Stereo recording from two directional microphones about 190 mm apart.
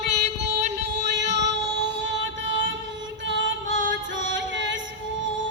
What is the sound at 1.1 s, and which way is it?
Child singing, 65° right (ahead or behind).